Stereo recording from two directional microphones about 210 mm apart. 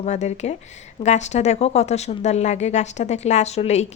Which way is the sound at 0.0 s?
35° left (ahead or behind).